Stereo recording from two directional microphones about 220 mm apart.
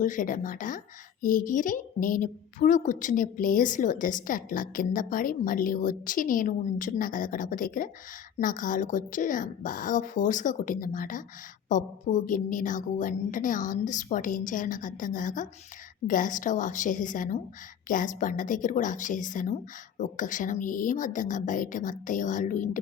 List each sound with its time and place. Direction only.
0.0 s a woman's voice: 35° left (ahead or behind)